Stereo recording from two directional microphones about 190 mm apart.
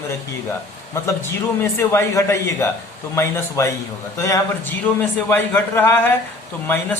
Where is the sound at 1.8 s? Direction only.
15° left (ahead or behind).